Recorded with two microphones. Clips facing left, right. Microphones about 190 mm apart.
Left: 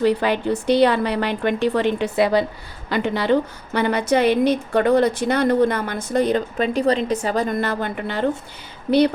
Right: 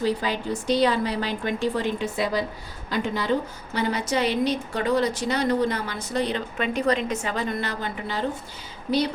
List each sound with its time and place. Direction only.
0.0 s a woman's voice: 65° left (ahead or behind)